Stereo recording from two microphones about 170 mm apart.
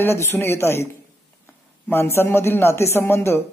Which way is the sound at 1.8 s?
15° left (ahead or behind).